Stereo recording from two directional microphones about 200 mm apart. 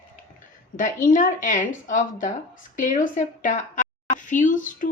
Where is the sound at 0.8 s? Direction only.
40° left (ahead or behind).